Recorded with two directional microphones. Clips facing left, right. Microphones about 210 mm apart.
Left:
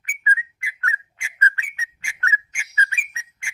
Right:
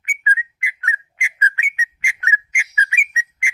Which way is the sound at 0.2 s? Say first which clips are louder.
Right 1 dB; 20° right (ahead or behind).